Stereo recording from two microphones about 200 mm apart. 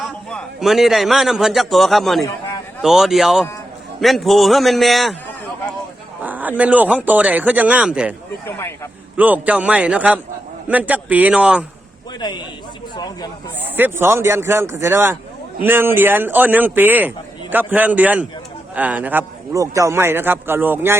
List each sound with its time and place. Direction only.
0.3 s a man's voice: centre (ahead or behind)
6.2 s a man's voice: 10° right (ahead or behind)
8.4 s speech: 10° left (ahead or behind)
9.1 s a man's voice: 10° right (ahead or behind)
13.0 s a sound: 20° left (ahead or behind)
13.7 s a man's voice: 10° right (ahead or behind)